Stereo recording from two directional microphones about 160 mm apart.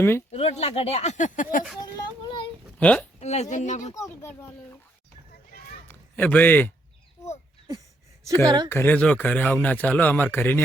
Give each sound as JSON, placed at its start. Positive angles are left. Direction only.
{"t": 0.3, "sound": "speech", "side_deg": 40}
{"t": 1.8, "sound": "a sound", "side_deg": 30}
{"t": 2.7, "sound": "speech", "side_deg": 10}
{"t": 3.2, "sound": "speech", "side_deg": 45}
{"t": 3.9, "sound": "speech", "side_deg": 20}
{"t": 5.9, "sound": "a man's voice", "side_deg": 10}
{"t": 8.4, "sound": "speech", "side_deg": -25}
{"t": 8.7, "sound": "speech", "side_deg": 10}